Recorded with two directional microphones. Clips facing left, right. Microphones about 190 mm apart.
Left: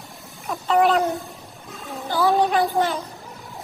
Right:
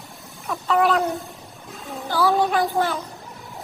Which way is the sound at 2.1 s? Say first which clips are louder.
Left 1 dB; 20° left (ahead or behind).